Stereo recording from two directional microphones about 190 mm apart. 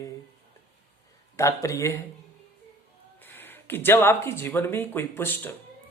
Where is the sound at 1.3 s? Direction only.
15° left (ahead or behind).